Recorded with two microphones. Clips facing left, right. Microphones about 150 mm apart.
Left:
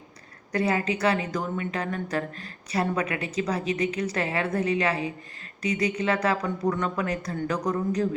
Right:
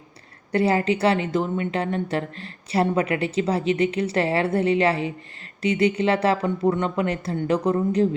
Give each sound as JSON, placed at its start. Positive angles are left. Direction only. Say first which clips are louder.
{"t": 0.5, "sound": "a woman's voice", "louder": "right 5 dB", "side_deg": -30}